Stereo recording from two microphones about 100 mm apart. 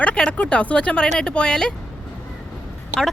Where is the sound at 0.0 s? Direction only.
10° left (ahead or behind).